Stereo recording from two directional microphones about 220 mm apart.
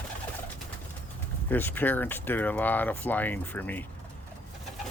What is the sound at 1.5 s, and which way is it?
Speech, 10° left (ahead or behind).